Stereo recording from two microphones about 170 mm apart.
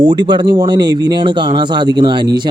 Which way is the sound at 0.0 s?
25° right (ahead or behind).